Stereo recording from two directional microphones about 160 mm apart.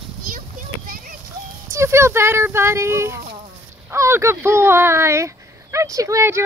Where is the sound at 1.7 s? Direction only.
15° right (ahead or behind).